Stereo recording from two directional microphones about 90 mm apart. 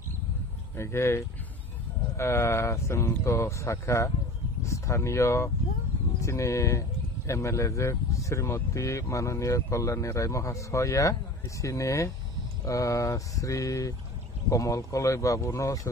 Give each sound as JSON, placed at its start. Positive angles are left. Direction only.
{"t": 0.7, "sound": "speech", "side_deg": 30}